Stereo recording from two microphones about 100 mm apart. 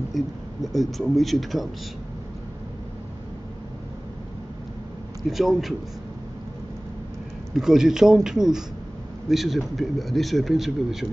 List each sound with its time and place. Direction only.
0.2 s a man's voice: centre (ahead or behind)
5.3 s a man's voice: centre (ahead or behind)
7.5 s a man's voice: 5° right (ahead or behind)